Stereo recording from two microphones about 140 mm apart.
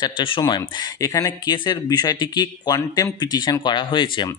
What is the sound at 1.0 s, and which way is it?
Speech, 25° left (ahead or behind).